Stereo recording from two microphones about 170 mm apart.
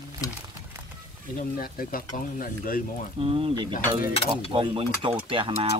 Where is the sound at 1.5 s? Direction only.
55° left (ahead or behind).